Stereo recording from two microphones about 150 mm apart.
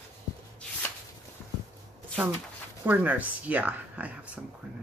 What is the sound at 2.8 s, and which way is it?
Speech, 10° right (ahead or behind).